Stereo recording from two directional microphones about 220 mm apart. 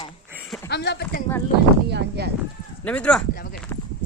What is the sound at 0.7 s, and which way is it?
Speech, 50° left (ahead or behind).